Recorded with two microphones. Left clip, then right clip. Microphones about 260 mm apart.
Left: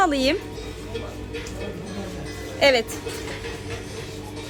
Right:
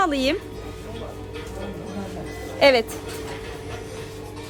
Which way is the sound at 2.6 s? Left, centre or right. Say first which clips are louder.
Right 2 dB; centre.